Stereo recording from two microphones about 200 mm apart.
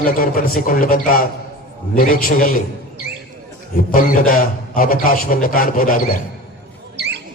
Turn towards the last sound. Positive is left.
turn(degrees=-55)  # may be behind; listen again after turning